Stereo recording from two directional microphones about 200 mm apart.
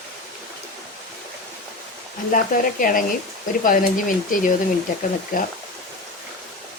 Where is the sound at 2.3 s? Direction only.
45° left (ahead or behind).